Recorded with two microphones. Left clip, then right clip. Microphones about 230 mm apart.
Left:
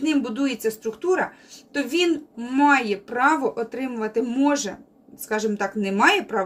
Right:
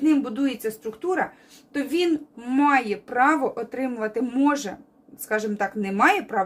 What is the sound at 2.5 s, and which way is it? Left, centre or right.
A woman's voice, centre.